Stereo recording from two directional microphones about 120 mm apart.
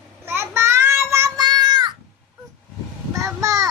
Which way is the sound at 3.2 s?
25° right (ahead or behind).